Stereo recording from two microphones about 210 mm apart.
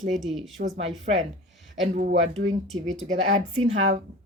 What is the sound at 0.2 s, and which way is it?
Speech, centre (ahead or behind).